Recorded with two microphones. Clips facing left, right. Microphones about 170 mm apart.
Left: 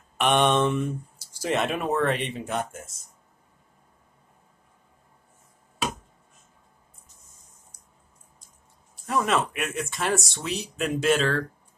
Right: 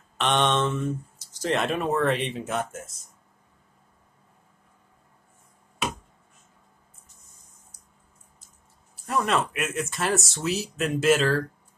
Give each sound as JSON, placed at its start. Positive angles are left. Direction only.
{"t": 0.2, "sound": "speech", "side_deg": 10}
{"t": 9.0, "sound": "speech", "side_deg": 0}